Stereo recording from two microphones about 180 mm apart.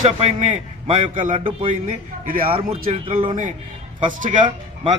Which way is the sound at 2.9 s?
30° right (ahead or behind).